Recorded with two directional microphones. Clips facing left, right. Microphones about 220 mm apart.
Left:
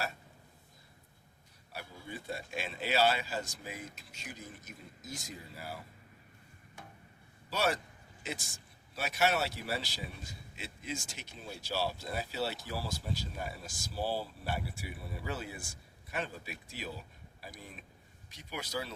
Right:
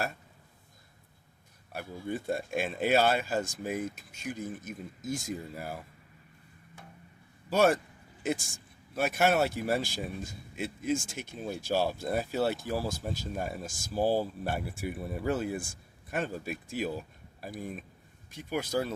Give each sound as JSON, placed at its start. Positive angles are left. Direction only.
{"t": 1.7, "sound": "speech", "side_deg": -50}
{"t": 7.5, "sound": "speech", "side_deg": -50}